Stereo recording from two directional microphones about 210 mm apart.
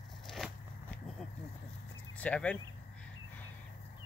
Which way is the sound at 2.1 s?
5° left (ahead or behind).